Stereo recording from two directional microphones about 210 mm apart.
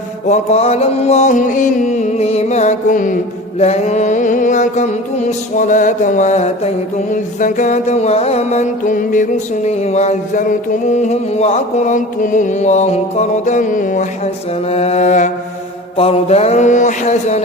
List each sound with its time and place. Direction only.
0.3 s music: 30° left (ahead or behind)